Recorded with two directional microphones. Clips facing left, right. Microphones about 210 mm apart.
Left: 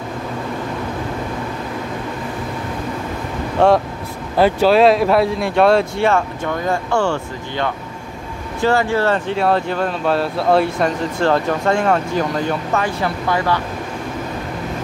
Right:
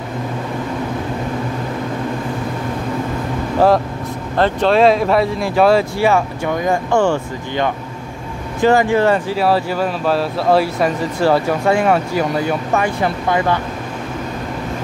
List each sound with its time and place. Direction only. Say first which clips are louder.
3.5 s speech: even; centre (ahead or behind)
9.3 s speech: right 1 dB; 5° right (ahead or behind)